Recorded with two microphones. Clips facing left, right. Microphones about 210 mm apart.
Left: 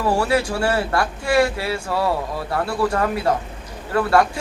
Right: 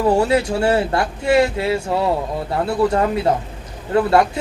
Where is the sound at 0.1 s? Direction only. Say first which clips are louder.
Right 1 dB; 20° right (ahead or behind).